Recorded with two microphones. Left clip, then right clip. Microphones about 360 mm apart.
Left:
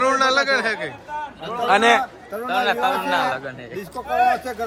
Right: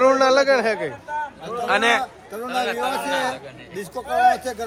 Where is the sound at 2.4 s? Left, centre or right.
Left.